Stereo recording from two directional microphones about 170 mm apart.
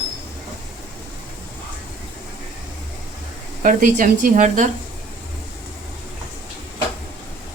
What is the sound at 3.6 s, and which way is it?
A woman's voice, 50° right (ahead or behind).